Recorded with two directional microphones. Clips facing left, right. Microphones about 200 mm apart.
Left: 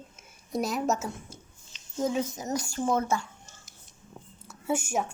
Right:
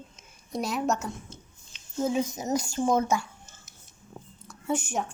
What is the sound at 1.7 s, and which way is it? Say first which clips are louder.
A woman's voice: right 1 dB; 10° right (ahead or behind).